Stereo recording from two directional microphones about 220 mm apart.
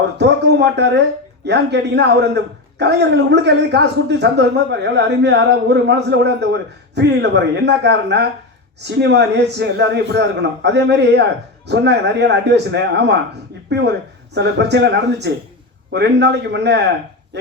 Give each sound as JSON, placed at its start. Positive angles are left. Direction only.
{"t": 0.2, "sound": "a man's voice", "side_deg": -50}